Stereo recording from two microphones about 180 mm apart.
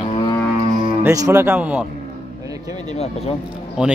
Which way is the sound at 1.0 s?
15° right (ahead or behind).